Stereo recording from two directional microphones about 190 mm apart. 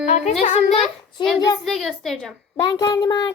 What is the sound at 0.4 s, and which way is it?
Speech, 35° left (ahead or behind).